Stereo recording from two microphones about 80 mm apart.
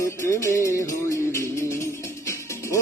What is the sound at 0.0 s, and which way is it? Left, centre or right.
Music, left.